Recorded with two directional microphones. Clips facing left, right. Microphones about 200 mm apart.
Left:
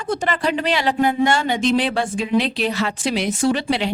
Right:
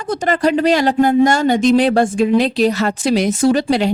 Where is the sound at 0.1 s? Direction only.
40° right (ahead or behind).